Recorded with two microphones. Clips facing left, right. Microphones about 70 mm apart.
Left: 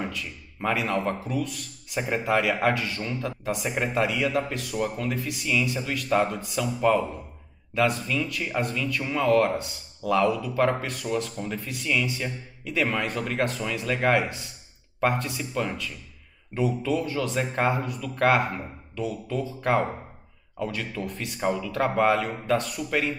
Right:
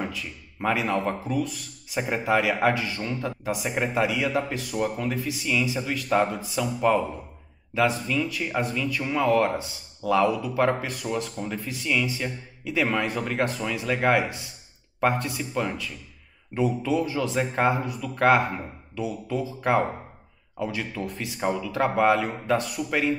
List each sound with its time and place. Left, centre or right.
0.0 s speech: centre